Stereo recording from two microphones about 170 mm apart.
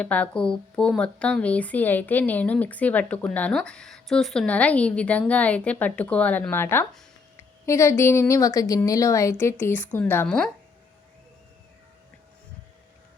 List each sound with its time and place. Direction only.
0.0 s speech: 5° left (ahead or behind)